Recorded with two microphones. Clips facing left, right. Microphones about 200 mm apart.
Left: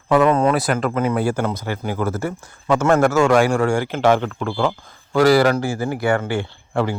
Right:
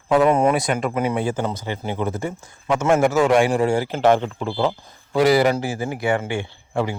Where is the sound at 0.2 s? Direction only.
10° right (ahead or behind).